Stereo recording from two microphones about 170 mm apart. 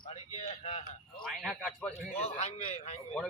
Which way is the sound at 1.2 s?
Centre (ahead or behind).